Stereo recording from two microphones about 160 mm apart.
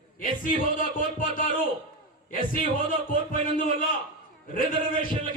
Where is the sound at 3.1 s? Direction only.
60° left (ahead or behind).